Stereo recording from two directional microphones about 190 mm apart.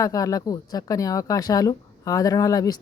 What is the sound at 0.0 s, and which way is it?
Speech, 20° left (ahead or behind).